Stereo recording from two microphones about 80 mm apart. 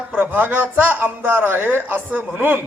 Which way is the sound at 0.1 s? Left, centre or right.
Right.